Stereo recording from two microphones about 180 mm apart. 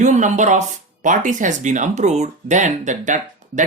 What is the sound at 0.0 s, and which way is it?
Speech, 40° right (ahead or behind).